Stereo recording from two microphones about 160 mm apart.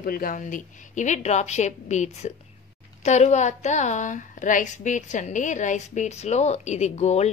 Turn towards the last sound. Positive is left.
turn(degrees=45)  # may be behind; listen again after turning